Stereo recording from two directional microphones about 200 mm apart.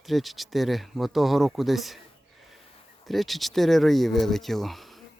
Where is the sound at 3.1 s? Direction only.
Centre (ahead or behind).